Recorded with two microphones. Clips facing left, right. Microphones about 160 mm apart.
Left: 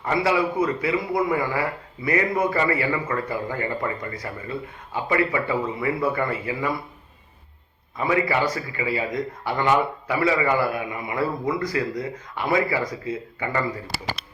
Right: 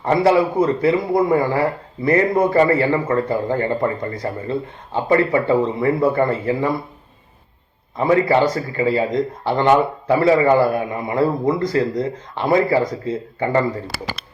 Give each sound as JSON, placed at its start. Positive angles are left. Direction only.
{"t": 0.0, "sound": "a man's voice", "side_deg": -40}
{"t": 7.9, "sound": "a man's voice", "side_deg": -35}
{"t": 9.0, "sound": "a man's voice", "side_deg": -25}